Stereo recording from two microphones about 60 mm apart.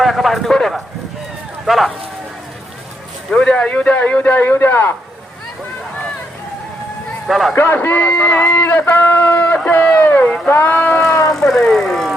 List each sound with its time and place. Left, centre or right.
0.0 s speech: centre
3.3 s a man's voice: centre; by 4.9 s left
7.3 s speech: centre
7.5 s speech: left
7.9 s a man's voice: left
8.4 s a man's voice: left
11.3 s speech: centre